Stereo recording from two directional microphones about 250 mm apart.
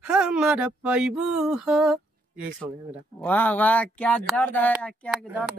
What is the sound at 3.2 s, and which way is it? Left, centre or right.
Speech, centre.